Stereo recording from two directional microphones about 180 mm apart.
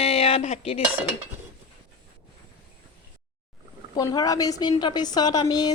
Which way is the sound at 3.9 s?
20° left (ahead or behind).